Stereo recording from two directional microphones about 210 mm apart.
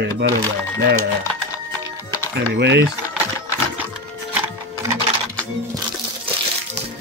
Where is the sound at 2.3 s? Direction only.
55° right (ahead or behind).